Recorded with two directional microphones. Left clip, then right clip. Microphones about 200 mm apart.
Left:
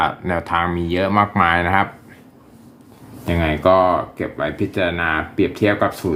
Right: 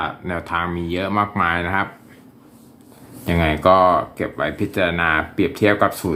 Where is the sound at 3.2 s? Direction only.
5° right (ahead or behind).